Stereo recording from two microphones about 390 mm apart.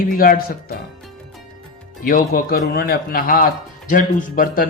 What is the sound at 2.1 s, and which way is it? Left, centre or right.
Speech, left.